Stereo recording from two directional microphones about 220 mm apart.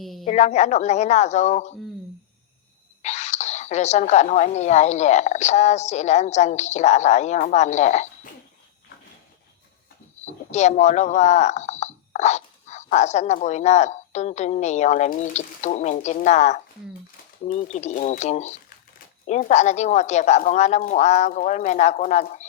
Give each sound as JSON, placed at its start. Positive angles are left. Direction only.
{"t": 0.0, "sound": "a sound", "side_deg": 0}
{"t": 0.3, "sound": "speech", "side_deg": 30}
{"t": 3.0, "sound": "speech", "side_deg": 30}
{"t": 10.2, "sound": "speech", "side_deg": 30}